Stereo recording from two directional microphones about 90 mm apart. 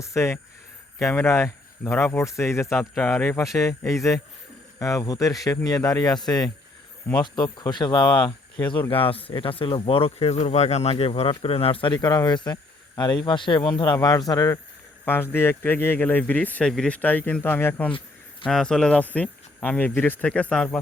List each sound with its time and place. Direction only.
0.0 s speech: 30° left (ahead or behind)
1.8 s speech: 20° left (ahead or behind)
2.9 s speech: 5° left (ahead or behind)
3.3 s speech: 35° left (ahead or behind)
8.9 s speech: 90° left
11.9 s speech: 50° left (ahead or behind)
13.9 s speech: 45° left (ahead or behind)
15.0 s speech: 25° left (ahead or behind)
18.4 s speech: 5° left (ahead or behind)